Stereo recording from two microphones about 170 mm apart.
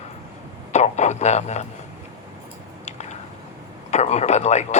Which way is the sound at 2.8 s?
40° left (ahead or behind).